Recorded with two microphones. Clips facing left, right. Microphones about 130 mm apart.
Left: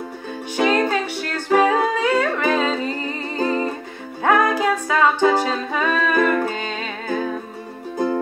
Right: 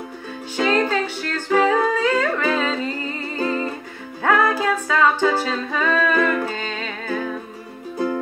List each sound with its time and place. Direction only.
0.6 s music: 15° left (ahead or behind)